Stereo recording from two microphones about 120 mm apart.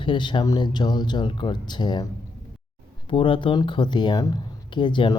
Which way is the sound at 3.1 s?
45° left (ahead or behind).